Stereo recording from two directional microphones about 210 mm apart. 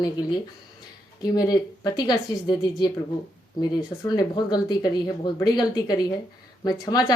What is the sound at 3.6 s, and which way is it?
Speech, 20° left (ahead or behind).